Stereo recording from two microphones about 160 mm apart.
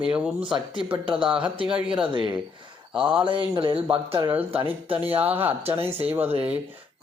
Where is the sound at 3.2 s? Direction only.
30° right (ahead or behind).